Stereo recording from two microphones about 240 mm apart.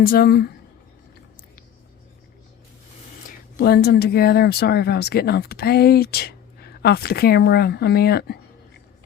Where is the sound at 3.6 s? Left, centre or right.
Left.